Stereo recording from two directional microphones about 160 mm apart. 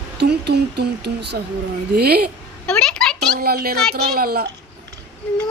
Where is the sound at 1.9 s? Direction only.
75° right (ahead or behind).